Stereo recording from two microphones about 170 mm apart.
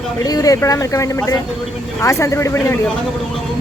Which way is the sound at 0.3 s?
20° left (ahead or behind).